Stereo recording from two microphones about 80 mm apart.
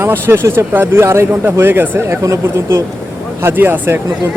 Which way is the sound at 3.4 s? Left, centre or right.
Right.